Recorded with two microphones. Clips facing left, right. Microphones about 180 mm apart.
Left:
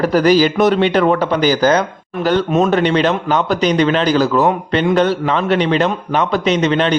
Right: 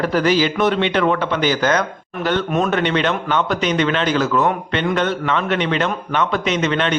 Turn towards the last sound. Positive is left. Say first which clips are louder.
# left 5 dB
turn(degrees=35)  # may be behind; listen again after turning